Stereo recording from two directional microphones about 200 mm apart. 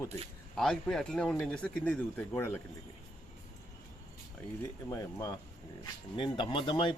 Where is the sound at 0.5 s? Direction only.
Centre (ahead or behind).